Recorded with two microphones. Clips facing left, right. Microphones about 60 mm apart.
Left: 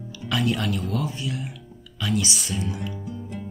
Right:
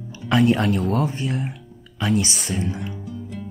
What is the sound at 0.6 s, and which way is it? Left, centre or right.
Speech, right.